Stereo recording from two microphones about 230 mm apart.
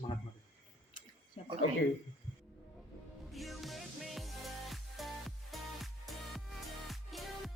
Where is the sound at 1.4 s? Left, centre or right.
Left.